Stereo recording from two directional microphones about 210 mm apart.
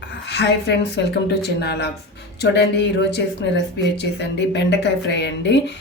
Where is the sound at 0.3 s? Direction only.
55° left (ahead or behind).